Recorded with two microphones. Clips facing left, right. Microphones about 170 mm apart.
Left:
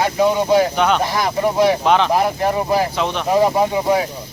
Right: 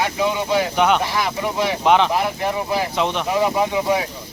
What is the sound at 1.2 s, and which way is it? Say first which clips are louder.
Speech: left 6 dB; 40° left (ahead or behind).